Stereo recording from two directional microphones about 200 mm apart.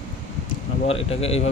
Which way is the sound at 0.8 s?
30° left (ahead or behind).